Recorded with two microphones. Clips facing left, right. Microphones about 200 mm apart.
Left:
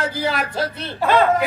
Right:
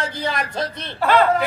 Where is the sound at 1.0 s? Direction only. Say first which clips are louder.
Even; 15° left (ahead or behind).